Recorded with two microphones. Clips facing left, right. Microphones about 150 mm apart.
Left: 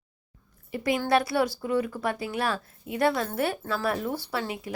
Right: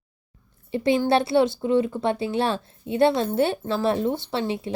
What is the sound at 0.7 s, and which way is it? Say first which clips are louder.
Speech: right 4 dB; 25° right (ahead or behind).